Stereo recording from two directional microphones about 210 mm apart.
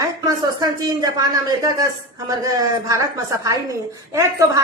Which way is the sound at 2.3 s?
15° right (ahead or behind).